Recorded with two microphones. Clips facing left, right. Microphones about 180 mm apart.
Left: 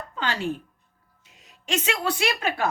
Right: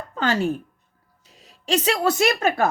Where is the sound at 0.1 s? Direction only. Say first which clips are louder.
Right 6 dB; 45° right (ahead or behind).